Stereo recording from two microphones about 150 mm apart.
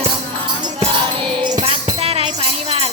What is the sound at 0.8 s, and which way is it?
Music, 35° right (ahead or behind).